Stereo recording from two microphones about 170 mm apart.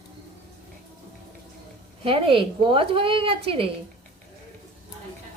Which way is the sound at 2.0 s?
30° right (ahead or behind).